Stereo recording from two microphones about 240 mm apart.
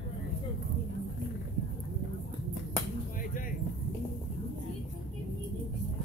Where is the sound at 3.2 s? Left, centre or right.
Left.